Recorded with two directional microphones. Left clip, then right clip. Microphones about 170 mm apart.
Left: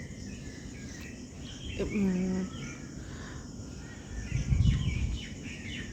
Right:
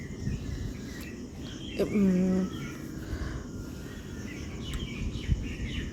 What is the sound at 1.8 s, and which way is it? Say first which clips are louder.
Speech: right 6 dB; 20° right (ahead or behind).